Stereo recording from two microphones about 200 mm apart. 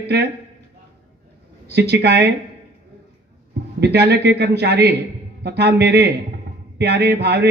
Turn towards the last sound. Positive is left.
turn(degrees=-55)  # may be behind; listen again after turning